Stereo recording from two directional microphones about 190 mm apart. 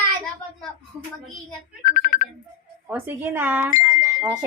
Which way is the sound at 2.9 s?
10° right (ahead or behind).